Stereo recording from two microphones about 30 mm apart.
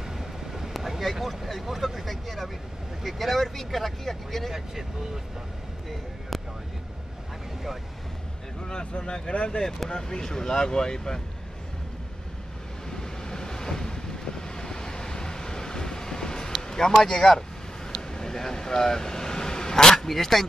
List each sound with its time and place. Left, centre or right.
0.2 s vehicle: centre
1.2 s speech: centre
4.5 s speech: centre
6.3 s vehicle: centre
8.6 s speech: left
9.3 s speech: left
9.8 s speech: left
12.9 s wind: left
16.9 s speech: centre
17.9 s vehicle: centre